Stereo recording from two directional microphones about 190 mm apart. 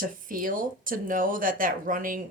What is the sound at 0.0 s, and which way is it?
Speech, 45° right (ahead or behind).